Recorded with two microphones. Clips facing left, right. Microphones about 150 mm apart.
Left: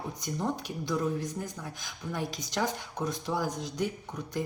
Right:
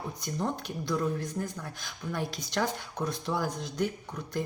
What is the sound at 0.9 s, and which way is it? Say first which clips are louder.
Speech: even; 15° left (ahead or behind).